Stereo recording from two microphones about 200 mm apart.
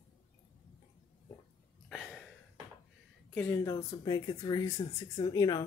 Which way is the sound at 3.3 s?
10° left (ahead or behind).